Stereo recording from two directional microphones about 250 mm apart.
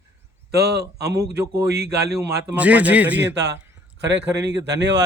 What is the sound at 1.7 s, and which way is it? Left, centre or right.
Speech, right.